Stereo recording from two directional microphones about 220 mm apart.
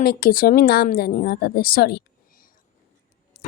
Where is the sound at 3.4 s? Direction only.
40° left (ahead or behind).